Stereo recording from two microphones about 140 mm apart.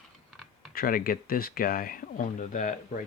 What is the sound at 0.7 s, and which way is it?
Speech, 90° left.